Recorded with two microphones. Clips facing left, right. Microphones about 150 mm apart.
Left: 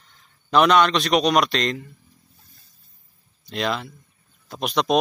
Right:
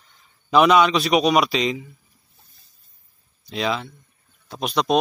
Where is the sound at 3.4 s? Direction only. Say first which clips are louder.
Right 1 dB; centre (ahead or behind).